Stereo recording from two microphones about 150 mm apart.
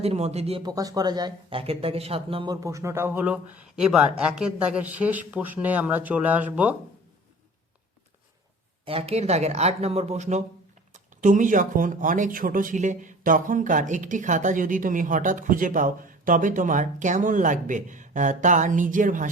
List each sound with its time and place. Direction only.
0.0 s speech: 45° right (ahead or behind)
0.6 s speech: 25° right (ahead or behind)
2.5 s speech: 20° right (ahead or behind)
8.8 s speech: 40° right (ahead or behind); by 19.3 s 60° right (ahead or behind)